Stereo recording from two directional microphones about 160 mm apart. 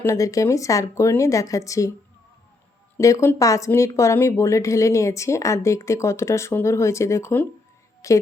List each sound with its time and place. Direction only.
0.0 s speech: 20° left (ahead or behind)
3.0 s speech: 20° left (ahead or behind)